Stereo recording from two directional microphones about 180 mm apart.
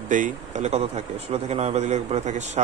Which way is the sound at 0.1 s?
45° right (ahead or behind).